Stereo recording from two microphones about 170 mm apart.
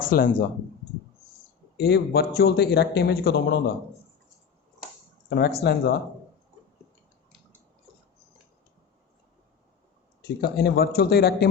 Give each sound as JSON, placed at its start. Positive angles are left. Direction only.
{"t": 0.1, "sound": "speech", "side_deg": 60}
{"t": 1.8, "sound": "a man's voice", "side_deg": 70}
{"t": 5.3, "sound": "a man's voice", "side_deg": 70}
{"t": 10.2, "sound": "a man's voice", "side_deg": 70}